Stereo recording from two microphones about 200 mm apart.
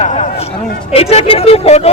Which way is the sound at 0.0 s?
35° left (ahead or behind).